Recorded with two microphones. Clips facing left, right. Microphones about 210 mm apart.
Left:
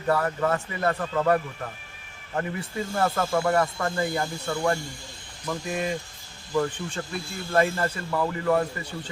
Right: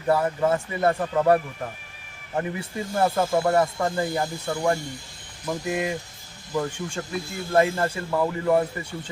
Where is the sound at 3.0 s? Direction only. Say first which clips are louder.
Right 3 dB; 20° right (ahead or behind).